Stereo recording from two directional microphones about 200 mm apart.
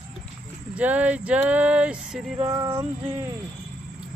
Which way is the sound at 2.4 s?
20° right (ahead or behind).